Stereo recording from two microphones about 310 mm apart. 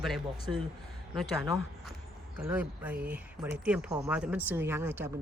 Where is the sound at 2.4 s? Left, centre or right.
Centre.